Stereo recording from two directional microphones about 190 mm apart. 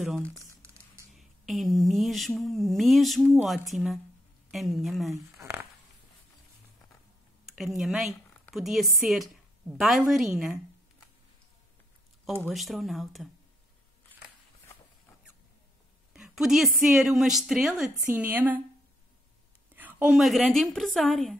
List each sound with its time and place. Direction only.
1.1 s speech: centre (ahead or behind)
5.1 s speech: 15° right (ahead or behind)
7.5 s a woman's voice: centre (ahead or behind)
12.4 s speech: centre (ahead or behind)
16.1 s a woman's voice: centre (ahead or behind)
19.7 s speech: 10° right (ahead or behind)